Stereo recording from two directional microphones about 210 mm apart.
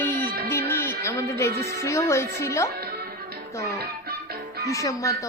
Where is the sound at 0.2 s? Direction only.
45° right (ahead or behind).